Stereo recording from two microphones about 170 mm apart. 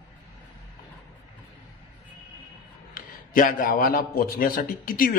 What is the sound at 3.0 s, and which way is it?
A man's voice, 55° left (ahead or behind).